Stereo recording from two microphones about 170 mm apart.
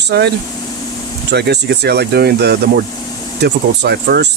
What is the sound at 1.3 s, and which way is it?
Speech, 80° right.